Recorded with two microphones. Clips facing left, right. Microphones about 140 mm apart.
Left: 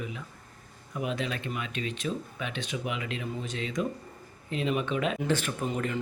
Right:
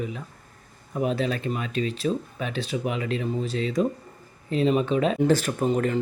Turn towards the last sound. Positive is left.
turn(degrees=-40)  # may be behind; listen again after turning